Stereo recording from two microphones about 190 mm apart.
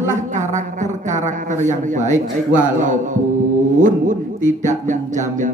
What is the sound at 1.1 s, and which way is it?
Speech, 40° right (ahead or behind).